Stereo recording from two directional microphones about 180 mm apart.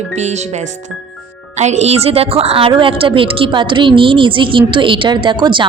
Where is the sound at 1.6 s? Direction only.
40° right (ahead or behind).